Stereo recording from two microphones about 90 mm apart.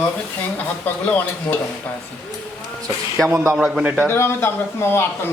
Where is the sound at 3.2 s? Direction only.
25° right (ahead or behind).